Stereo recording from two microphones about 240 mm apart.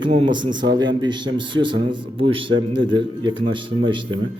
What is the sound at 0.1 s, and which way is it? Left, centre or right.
Speech, centre.